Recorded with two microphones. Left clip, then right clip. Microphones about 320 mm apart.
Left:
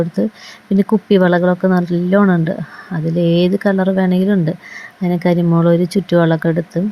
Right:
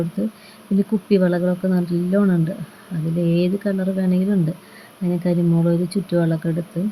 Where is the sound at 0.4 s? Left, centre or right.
Left.